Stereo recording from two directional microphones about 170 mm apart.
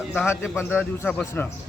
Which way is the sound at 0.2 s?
15° left (ahead or behind).